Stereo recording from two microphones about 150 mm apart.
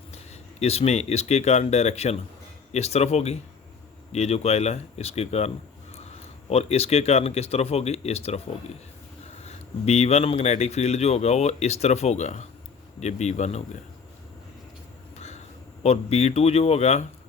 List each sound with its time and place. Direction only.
0.6 s speech: 45° left (ahead or behind)
6.5 s speech: 45° left (ahead or behind)
9.4 s speech: 45° left (ahead or behind)
15.1 s vehicle: 45° left (ahead or behind)
15.8 s speech: 45° left (ahead or behind)